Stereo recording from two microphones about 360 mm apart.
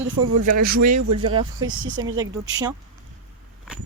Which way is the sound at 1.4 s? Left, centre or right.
Centre.